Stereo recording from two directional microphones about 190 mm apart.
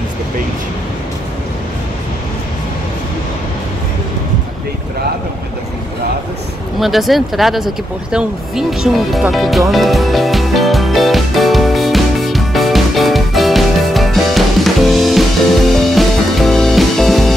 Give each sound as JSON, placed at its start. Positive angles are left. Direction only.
{"t": 6.8, "sound": "vehicle", "side_deg": 0}